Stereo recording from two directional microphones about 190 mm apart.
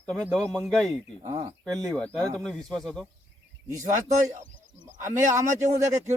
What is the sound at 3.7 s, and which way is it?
Speech, 20° right (ahead or behind).